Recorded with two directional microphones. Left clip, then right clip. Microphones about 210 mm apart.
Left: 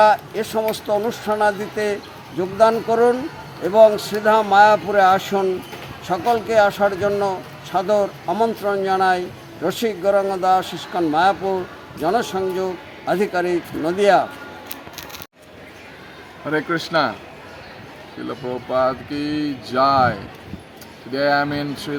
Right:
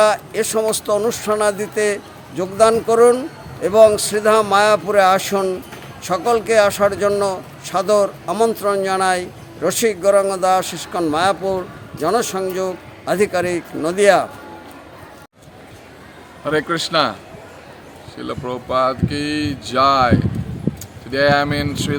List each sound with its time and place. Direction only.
0.0 s speech: 15° right (ahead or behind)
16.5 s speech: 10° right (ahead or behind)
18.3 s speech: 5° right (ahead or behind)
21.1 s speech: 5° right (ahead or behind)